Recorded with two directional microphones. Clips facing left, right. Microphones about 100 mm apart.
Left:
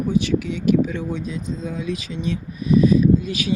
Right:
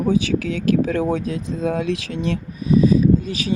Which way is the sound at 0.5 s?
90° right.